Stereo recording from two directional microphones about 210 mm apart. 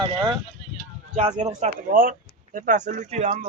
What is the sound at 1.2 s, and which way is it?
Speech, 35° right (ahead or behind).